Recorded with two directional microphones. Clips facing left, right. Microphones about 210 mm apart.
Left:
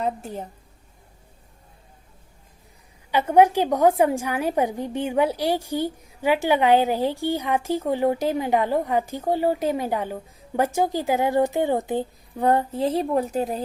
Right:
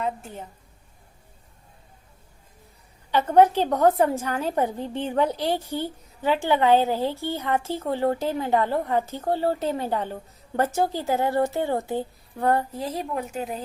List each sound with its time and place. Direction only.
0.0 s a woman's voice: 40° left (ahead or behind)
3.1 s a woman's voice: 10° left (ahead or behind); by 13.6 s 35° left (ahead or behind)